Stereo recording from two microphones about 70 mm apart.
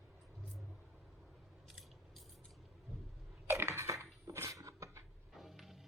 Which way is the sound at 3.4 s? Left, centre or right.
Right.